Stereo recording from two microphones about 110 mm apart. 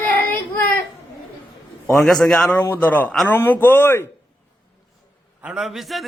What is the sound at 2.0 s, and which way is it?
Speech, 5° left (ahead or behind).